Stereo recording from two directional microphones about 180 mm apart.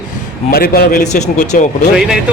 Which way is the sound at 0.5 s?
60° left (ahead or behind).